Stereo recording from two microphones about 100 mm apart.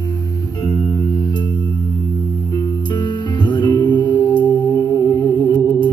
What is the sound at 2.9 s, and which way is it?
Music, 50° left (ahead or behind).